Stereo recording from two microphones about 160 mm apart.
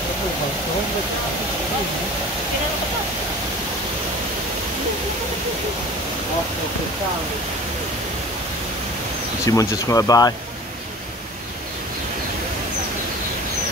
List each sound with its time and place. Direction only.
9.5 s speech: 20° left (ahead or behind)